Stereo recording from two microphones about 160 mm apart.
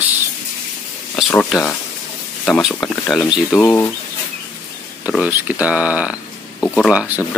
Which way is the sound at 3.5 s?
15° left (ahead or behind).